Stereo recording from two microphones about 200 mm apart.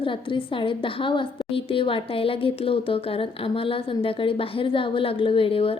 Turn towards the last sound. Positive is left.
turn(degrees=30)  # may be behind; listen again after turning